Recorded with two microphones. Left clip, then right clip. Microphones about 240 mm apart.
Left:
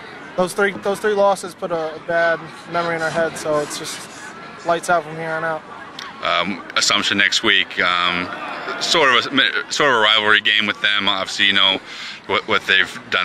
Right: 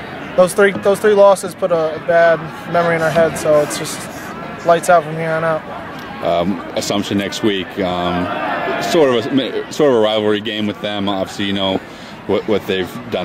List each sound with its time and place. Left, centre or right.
0.4 s speech: centre
6.7 s speech: centre